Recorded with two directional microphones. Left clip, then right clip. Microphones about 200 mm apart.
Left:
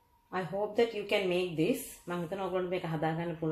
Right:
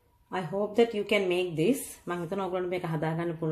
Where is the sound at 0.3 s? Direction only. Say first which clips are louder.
Right 3 dB; 55° right (ahead or behind).